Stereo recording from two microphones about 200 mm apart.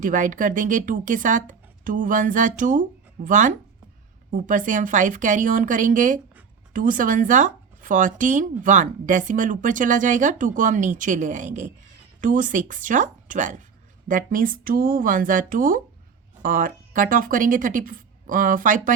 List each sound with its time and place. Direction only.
0.0 s speech: 40° right (ahead or behind)